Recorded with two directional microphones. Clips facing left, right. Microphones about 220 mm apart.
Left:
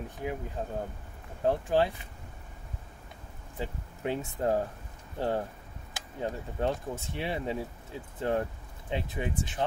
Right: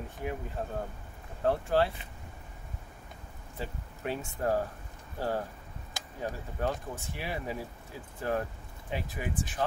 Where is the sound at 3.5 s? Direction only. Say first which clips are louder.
Left 2 dB; 20° left (ahead or behind).